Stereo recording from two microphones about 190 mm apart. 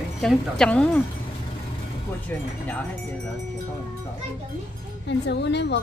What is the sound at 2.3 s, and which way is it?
Wind chime, 10° left (ahead or behind).